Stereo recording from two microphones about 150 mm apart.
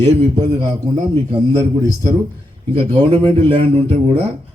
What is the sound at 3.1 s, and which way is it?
Speech, 35° right (ahead or behind).